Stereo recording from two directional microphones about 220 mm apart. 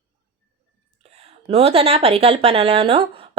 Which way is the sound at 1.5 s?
30° right (ahead or behind).